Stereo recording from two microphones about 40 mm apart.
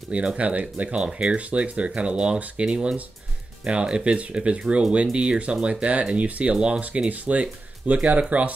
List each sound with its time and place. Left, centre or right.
0.1 s speech: right
0.9 s speech: centre
1.3 s speech: right
6.5 s speech: right
7.1 s speech: right